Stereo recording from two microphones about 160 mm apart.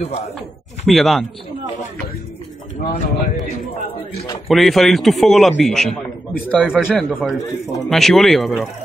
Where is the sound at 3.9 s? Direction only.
40° left (ahead or behind).